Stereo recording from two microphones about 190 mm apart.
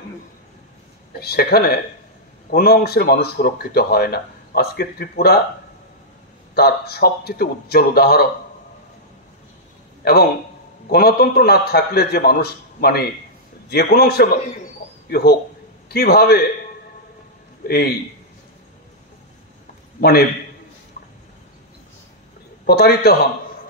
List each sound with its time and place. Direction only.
1.2 s speech: 55° left (ahead or behind)
6.5 s speech: 55° left (ahead or behind)
10.9 s speech: 55° left (ahead or behind)
17.6 s speech: 55° left (ahead or behind)
20.0 s speech: 55° left (ahead or behind)
22.7 s speech: 55° left (ahead or behind)